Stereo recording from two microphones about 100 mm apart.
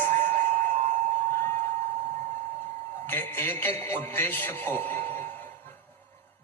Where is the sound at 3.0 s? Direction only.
20° left (ahead or behind).